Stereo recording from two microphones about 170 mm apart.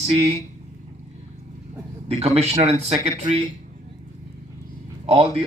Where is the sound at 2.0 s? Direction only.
35° right (ahead or behind).